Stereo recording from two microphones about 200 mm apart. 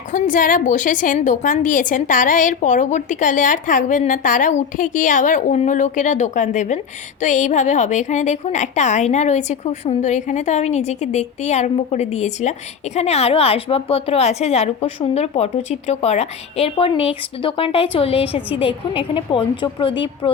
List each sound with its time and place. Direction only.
0.1 s a woman's voice: 40° left (ahead or behind); by 20.3 s 25° left (ahead or behind)